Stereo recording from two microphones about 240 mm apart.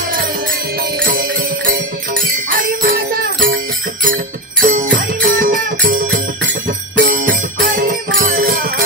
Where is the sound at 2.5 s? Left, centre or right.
Right.